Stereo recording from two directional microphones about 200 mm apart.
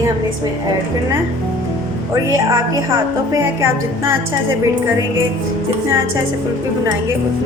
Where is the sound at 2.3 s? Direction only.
15° right (ahead or behind).